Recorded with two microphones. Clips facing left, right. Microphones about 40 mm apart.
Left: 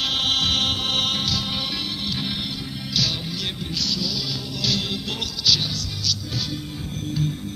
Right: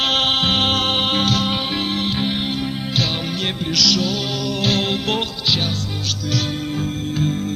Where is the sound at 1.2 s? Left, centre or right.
Right.